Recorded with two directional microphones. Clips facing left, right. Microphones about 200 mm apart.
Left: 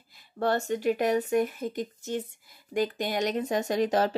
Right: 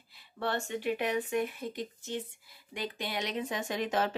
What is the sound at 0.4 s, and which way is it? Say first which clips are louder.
Speech: left 7 dB; 40° left (ahead or behind).